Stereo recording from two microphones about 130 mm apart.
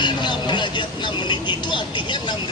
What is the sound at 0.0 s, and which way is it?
Vehicle, 35° left (ahead or behind).